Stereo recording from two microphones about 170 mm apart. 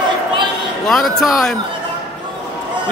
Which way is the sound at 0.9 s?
Centre (ahead or behind).